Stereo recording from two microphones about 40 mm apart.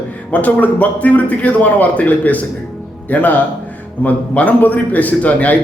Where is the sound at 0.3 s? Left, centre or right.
Left.